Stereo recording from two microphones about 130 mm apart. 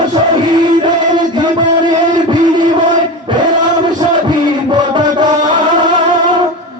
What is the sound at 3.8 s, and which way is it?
Music, 35° right (ahead or behind).